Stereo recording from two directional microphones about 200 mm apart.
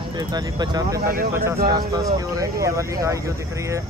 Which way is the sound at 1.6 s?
20° right (ahead or behind).